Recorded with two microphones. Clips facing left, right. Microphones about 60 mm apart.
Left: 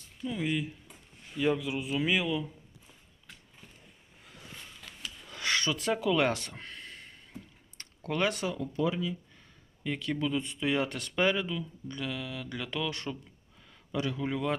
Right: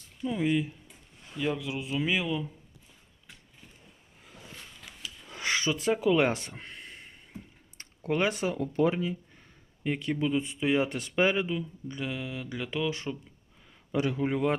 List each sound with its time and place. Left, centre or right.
0.2 s speech: centre
5.2 s a sound: right
8.5 s speech: right
9.8 s speech: right
13.9 s a man's voice: right